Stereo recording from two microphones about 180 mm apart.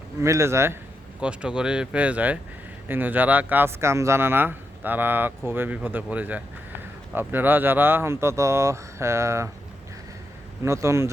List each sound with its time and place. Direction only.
0.2 s speech: 15° right (ahead or behind)
10.6 s speech: 15° right (ahead or behind)